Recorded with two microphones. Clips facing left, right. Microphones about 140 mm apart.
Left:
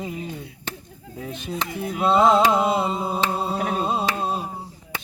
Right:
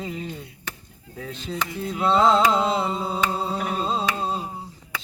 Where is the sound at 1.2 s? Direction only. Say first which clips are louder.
Left 1 dB; 20° left (ahead or behind).